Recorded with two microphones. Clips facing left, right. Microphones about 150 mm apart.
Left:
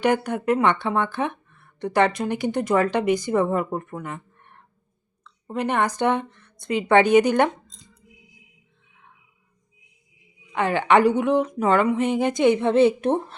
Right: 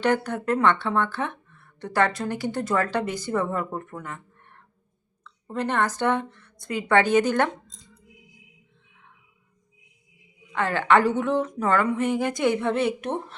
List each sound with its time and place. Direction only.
0.0 s a woman's voice: 15° left (ahead or behind)
10.5 s a woman's voice: 15° left (ahead or behind)